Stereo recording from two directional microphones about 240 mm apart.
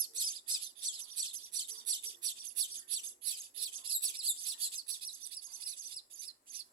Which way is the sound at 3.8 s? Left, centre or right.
Right.